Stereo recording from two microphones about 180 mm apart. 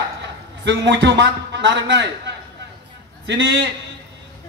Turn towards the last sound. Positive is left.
turn(degrees=-90)